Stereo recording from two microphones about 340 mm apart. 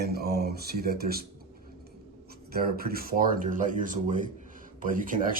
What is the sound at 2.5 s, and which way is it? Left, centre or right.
Speech, right.